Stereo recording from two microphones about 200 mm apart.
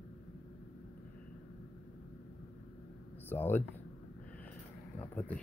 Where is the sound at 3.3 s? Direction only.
10° left (ahead or behind).